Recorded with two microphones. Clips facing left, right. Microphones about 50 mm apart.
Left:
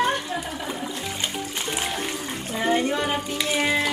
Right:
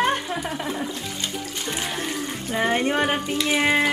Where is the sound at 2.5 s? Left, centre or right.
Right.